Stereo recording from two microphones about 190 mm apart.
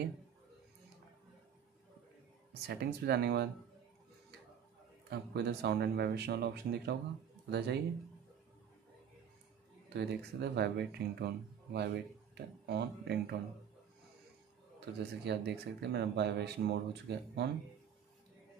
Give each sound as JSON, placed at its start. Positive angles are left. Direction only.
{"t": 2.6, "sound": "speech", "side_deg": -60}
{"t": 5.1, "sound": "speech", "side_deg": -60}
{"t": 9.9, "sound": "speech", "side_deg": -60}
{"t": 14.9, "sound": "speech", "side_deg": -65}